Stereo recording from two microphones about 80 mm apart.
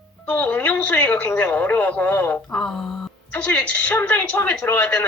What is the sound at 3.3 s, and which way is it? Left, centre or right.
Speech, centre.